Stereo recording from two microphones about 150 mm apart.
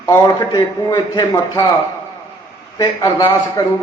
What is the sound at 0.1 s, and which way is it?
A man's voice, 25° left (ahead or behind).